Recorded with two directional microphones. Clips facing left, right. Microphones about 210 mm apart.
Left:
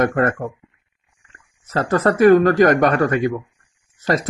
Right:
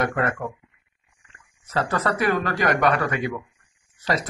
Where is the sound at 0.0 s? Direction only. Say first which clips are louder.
Left 6 dB; 45° left (ahead or behind).